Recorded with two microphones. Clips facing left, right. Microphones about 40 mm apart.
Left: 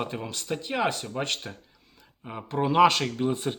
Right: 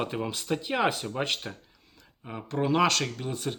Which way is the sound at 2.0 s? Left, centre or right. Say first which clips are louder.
Left 1 dB; centre.